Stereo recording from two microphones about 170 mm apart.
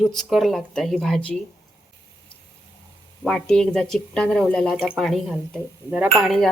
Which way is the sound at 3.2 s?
5° left (ahead or behind).